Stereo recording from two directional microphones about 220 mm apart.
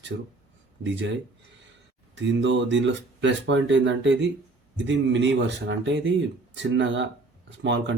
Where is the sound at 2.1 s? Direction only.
55° right (ahead or behind).